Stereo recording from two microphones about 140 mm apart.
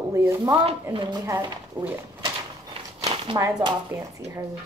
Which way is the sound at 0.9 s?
30° right (ahead or behind).